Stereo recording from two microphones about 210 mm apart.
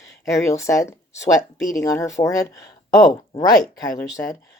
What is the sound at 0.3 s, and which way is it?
Speech, 15° left (ahead or behind).